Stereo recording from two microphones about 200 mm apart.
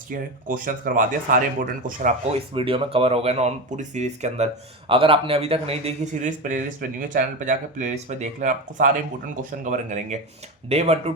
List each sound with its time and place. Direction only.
0.1 s a man's voice: 45° right (ahead or behind)
2.6 s a man's voice: 25° right (ahead or behind)